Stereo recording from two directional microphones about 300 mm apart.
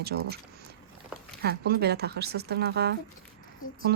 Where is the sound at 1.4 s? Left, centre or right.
Right.